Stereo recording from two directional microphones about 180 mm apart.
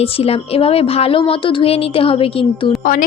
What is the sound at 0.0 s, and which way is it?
Speech, 30° left (ahead or behind).